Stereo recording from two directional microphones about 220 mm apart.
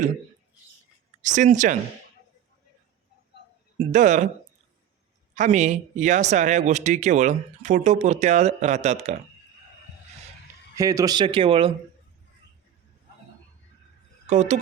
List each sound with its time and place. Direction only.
1.2 s speech: 35° right (ahead or behind)
3.8 s speech: 35° right (ahead or behind)
5.3 s speech: 30° right (ahead or behind)
10.8 s speech: 15° right (ahead or behind)
14.3 s speech: 30° right (ahead or behind)